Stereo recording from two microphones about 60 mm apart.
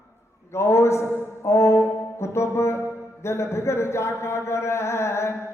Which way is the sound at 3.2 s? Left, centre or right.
Left.